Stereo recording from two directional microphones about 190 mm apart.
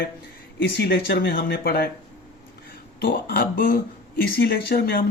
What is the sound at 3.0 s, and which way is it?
Speech, 55° left (ahead or behind).